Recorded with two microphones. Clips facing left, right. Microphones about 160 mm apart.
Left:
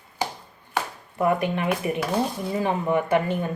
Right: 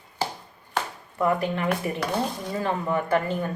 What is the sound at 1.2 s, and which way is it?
A woman's voice, 15° left (ahead or behind).